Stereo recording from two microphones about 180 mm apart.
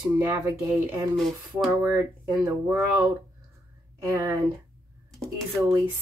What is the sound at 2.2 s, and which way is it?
Speech, 25° right (ahead or behind).